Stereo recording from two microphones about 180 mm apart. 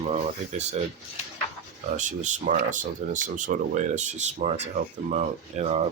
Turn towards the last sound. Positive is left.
turn(degrees=-35)  # may be behind; listen again after turning